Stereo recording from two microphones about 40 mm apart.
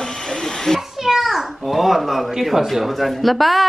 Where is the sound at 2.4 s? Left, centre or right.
Centre.